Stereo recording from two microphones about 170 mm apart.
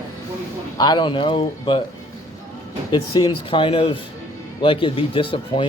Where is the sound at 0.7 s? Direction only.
25° left (ahead or behind).